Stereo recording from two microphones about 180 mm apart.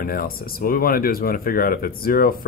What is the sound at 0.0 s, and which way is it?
Speech, 55° left (ahead or behind).